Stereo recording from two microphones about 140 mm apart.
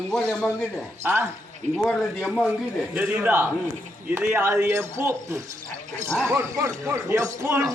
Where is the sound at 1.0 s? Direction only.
15° right (ahead or behind).